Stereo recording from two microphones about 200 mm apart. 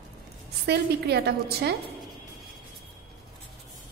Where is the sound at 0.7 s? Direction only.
55° right (ahead or behind).